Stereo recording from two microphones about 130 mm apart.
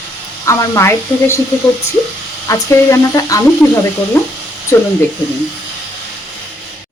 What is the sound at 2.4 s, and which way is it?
Speech, 25° left (ahead or behind).